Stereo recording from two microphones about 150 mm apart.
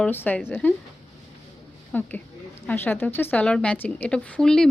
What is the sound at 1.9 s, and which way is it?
A woman's voice, 10° left (ahead or behind).